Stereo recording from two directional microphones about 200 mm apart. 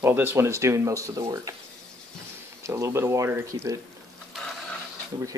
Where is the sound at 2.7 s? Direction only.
15° right (ahead or behind).